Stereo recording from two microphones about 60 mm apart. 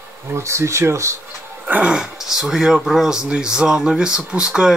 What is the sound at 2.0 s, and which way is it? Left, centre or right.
Speech, centre.